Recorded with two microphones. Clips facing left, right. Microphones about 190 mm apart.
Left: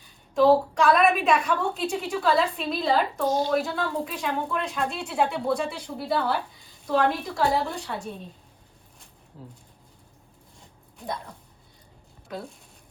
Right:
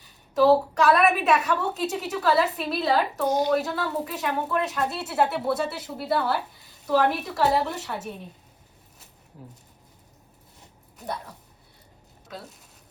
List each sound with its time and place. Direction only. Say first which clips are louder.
0.3 s a woman's voice: even; 5° right (ahead or behind)
3.2 s a woman's voice: right 2 dB; 20° right (ahead or behind)
3.8 s speech: even; 5° right (ahead or behind)
7.0 s a woman's voice: even; 20° right (ahead or behind)
7.3 s speech: right 3 dB; 5° right (ahead or behind)
7.9 s a woman's voice: even; 20° right (ahead or behind)
10.9 s speech: even; 5° right (ahead or behind)